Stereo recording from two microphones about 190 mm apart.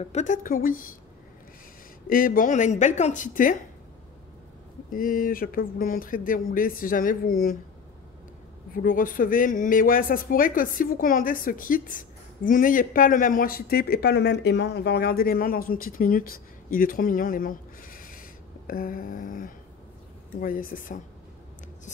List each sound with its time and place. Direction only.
0.0 s a man's voice: 35° left (ahead or behind)
2.0 s speech: 45° left (ahead or behind)
4.9 s a man's voice: 45° left (ahead or behind)
8.7 s a man's voice: 45° left (ahead or behind)